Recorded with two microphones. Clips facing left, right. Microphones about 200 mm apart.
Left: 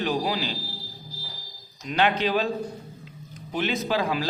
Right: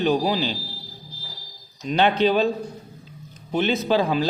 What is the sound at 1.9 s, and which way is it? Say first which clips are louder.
Speech: right 4 dB; 30° right (ahead or behind).